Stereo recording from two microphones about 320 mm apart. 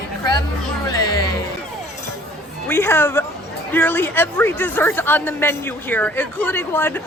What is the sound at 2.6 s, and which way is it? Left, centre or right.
Speech, centre.